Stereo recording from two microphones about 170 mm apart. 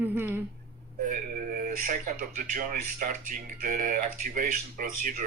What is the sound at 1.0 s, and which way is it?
Speech, 50° right (ahead or behind).